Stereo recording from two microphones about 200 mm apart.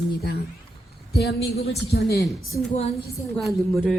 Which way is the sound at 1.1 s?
55° left (ahead or behind).